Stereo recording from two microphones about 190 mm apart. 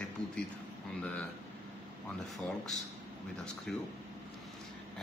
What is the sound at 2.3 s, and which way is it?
A man's voice, centre (ahead or behind).